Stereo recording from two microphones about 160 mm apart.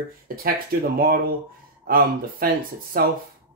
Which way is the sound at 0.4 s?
70° right (ahead or behind).